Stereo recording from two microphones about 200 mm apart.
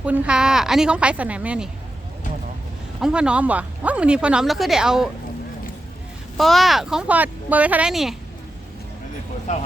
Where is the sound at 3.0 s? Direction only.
5° right (ahead or behind).